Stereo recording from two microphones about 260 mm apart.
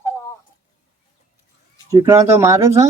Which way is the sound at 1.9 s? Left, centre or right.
Centre.